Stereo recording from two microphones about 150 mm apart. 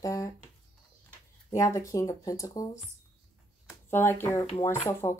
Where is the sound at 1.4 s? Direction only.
20° left (ahead or behind).